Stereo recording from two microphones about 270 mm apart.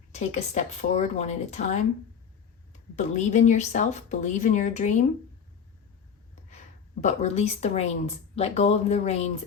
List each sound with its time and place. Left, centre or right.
0.1 s speech: left
2.9 s speech: left
7.0 s speech: left